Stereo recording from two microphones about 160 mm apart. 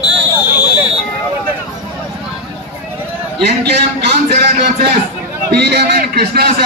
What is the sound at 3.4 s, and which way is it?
Speech, 90° right.